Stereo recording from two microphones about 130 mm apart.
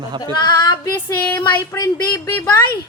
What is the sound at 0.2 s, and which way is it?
Speech, 35° left (ahead or behind).